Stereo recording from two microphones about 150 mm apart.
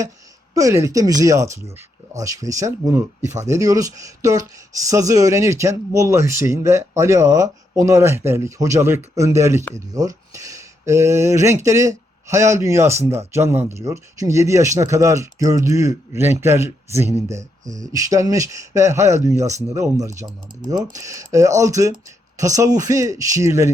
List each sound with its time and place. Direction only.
0.5 s speech: 20° right (ahead or behind)